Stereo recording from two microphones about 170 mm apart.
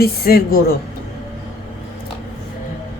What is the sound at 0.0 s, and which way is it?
Speech, 60° left (ahead or behind).